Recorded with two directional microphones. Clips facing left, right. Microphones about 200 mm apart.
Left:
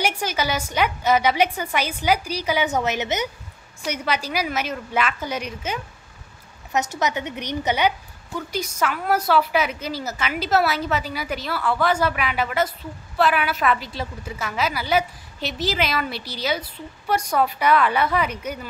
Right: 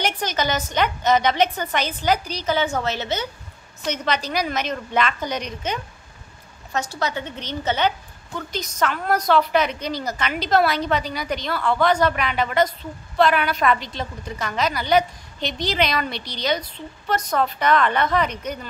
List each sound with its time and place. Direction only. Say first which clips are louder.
0.0 s a woman's voice: even; 10° left (ahead or behind)
6.7 s a woman's voice: left 2 dB; 20° left (ahead or behind)